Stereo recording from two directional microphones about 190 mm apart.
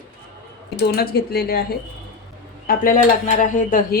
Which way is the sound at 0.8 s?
55° left (ahead or behind).